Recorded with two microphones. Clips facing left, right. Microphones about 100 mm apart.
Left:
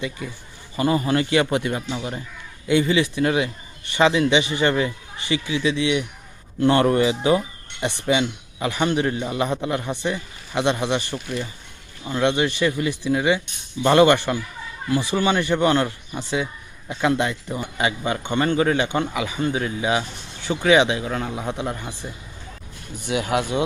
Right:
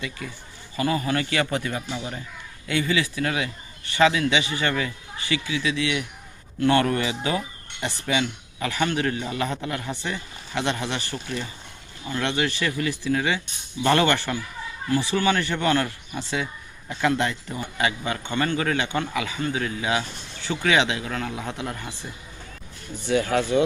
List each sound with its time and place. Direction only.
0.8 s speech: 30° left (ahead or behind)